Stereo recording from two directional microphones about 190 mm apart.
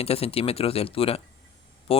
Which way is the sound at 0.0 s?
30° left (ahead or behind).